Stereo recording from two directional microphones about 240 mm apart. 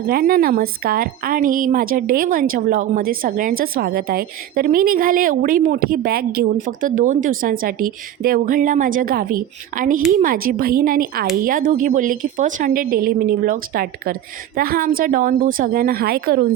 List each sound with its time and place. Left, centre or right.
0.1 s a woman's voice: right